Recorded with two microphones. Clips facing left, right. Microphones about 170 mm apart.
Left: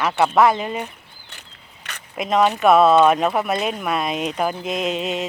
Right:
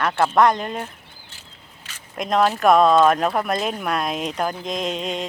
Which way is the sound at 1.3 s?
65° left (ahead or behind).